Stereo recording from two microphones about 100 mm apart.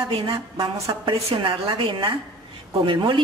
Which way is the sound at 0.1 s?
65° right (ahead or behind).